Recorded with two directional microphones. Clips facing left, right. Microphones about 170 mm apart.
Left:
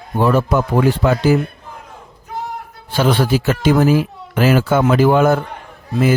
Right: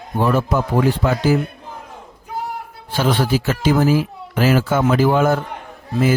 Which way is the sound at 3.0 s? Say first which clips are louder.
Left 3 dB; 70° left (ahead or behind).